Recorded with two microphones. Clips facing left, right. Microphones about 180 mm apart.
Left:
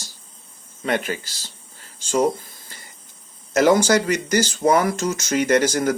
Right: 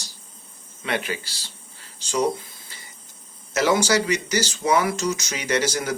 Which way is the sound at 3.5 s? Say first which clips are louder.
Left 4 dB; 50° left (ahead or behind).